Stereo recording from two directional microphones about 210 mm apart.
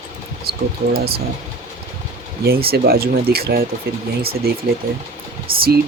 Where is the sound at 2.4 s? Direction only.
45° right (ahead or behind).